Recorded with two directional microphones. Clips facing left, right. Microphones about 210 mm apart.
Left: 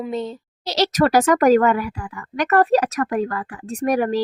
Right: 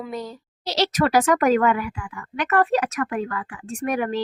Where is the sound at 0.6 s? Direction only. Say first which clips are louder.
Left 3 dB; 40° left (ahead or behind).